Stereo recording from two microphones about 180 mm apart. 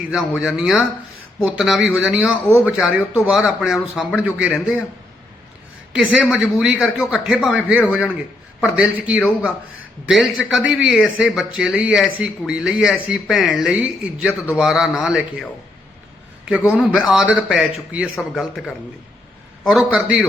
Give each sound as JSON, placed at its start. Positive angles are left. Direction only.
{"t": 0.1, "sound": "a man's voice", "side_deg": 0}
{"t": 5.9, "sound": "a man's voice", "side_deg": -5}
{"t": 17.1, "sound": "a man's voice", "side_deg": -5}